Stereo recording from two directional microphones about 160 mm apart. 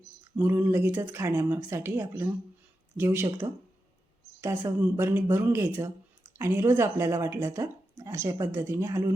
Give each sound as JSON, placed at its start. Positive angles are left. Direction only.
{"t": 0.3, "sound": "speech", "side_deg": -10}